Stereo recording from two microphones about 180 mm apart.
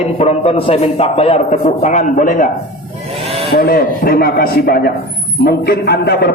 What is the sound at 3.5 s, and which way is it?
A man's voice, 55° left (ahead or behind).